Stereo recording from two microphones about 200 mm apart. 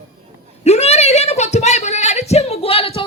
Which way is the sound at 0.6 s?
30° left (ahead or behind).